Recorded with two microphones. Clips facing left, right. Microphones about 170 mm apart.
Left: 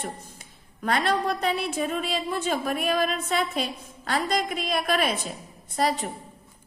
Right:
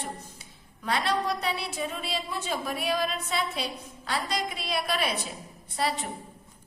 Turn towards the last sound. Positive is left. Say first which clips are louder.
# left 4 dB
turn(degrees=45)  # may be behind; listen again after turning